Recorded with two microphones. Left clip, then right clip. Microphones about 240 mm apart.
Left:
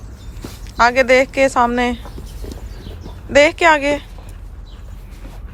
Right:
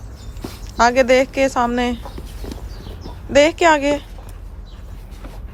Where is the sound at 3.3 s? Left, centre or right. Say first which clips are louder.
Left 2 dB; centre.